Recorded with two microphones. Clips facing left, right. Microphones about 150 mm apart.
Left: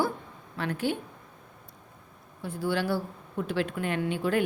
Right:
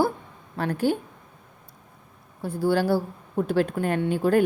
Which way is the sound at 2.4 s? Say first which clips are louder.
Right 6 dB; 35° right (ahead or behind).